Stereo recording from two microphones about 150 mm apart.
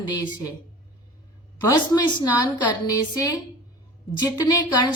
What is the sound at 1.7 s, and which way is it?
A woman's voice, 25° left (ahead or behind).